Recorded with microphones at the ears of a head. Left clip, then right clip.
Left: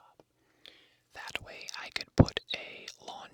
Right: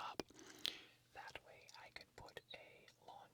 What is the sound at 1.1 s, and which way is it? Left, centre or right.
Whispering, left.